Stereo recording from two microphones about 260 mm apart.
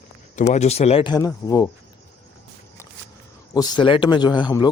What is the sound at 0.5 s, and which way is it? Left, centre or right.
Speech, left.